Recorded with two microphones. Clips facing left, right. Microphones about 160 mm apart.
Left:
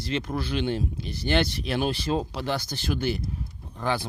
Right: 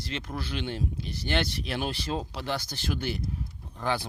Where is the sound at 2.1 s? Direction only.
75° left (ahead or behind).